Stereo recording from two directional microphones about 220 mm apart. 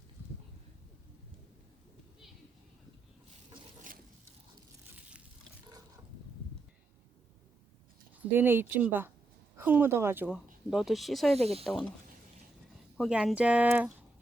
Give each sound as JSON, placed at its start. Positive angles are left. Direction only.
{"t": 8.3, "sound": "speech", "side_deg": -10}
{"t": 11.3, "sound": "speech", "side_deg": -30}
{"t": 11.6, "sound": "speech", "side_deg": 0}
{"t": 13.0, "sound": "speech", "side_deg": 0}